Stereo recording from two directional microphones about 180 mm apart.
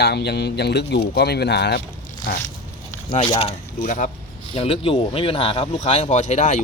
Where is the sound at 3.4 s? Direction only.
30° left (ahead or behind).